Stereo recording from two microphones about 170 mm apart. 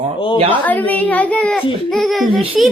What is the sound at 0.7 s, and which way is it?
A child's voice, 10° left (ahead or behind).